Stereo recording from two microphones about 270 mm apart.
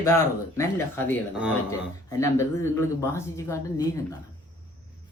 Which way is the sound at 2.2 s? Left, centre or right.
Centre.